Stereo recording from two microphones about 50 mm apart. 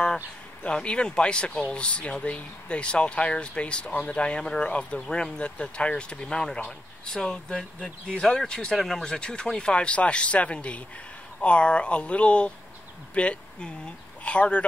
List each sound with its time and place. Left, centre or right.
0.7 s speech: left